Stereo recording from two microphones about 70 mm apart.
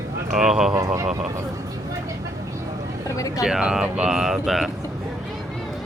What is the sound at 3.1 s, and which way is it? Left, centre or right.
Speech, left.